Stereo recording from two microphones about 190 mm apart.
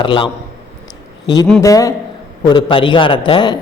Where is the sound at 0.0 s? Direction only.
25° left (ahead or behind).